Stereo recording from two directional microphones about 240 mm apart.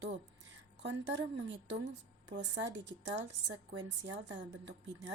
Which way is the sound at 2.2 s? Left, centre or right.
Right.